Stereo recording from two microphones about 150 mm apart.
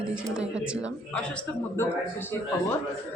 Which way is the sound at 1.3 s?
15° left (ahead or behind).